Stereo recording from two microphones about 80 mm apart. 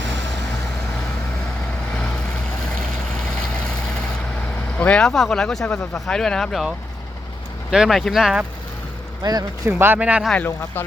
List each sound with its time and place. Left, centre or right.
4.8 s speech: centre
5.0 s speech: centre
7.7 s speech: centre
9.2 s speech: right
9.6 s speech: right
10.0 s speech: centre
10.3 s speech: left